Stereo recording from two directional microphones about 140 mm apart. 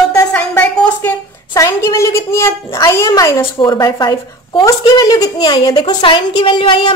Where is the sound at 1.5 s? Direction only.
25° left (ahead or behind).